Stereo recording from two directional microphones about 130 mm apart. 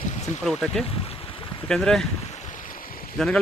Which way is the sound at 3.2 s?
5° left (ahead or behind).